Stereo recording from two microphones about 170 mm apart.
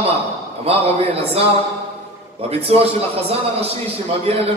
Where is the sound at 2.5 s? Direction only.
35° right (ahead or behind).